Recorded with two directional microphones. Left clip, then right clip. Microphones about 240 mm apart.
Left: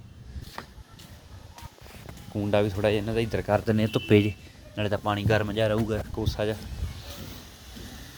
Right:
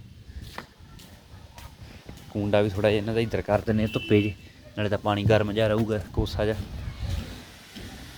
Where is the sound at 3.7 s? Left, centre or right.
Centre.